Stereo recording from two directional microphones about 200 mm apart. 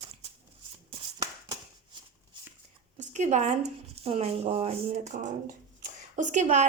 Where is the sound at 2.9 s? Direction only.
35° right (ahead or behind).